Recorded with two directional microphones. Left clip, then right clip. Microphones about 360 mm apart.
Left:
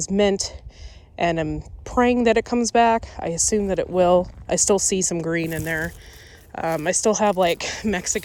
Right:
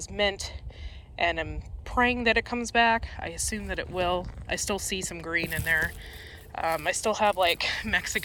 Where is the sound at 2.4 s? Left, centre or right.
Left.